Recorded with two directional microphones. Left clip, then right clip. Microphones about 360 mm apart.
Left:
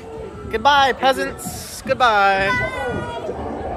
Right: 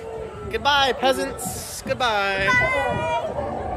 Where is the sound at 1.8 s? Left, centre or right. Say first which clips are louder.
Left 7 dB; centre.